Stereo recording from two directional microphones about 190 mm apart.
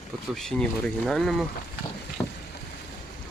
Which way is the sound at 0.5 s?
5° left (ahead or behind).